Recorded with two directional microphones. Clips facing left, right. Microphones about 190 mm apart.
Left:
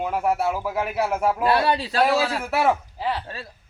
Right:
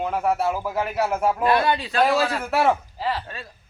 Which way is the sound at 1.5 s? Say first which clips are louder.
Even; 35° left (ahead or behind).